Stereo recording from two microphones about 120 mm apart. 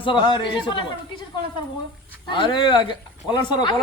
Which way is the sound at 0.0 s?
40° left (ahead or behind).